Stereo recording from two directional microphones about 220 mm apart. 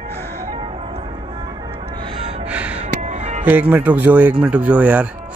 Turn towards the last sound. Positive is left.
turn(degrees=-5)  # may be behind; listen again after turning